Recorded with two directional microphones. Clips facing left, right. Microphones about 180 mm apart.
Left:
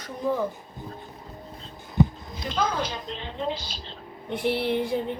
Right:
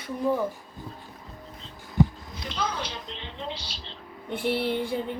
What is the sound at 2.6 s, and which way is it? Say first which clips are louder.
Music: left 5 dB; 45° left (ahead or behind).